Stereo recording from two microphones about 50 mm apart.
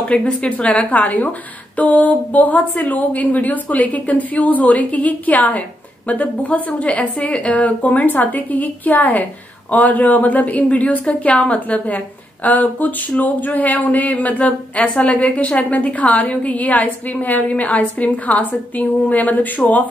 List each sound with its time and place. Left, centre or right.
0.1 s a woman's voice: left